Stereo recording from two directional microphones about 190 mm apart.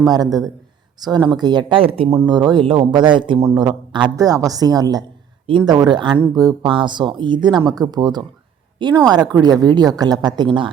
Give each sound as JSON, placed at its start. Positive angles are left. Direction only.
{"t": 0.0, "sound": "speech", "side_deg": -20}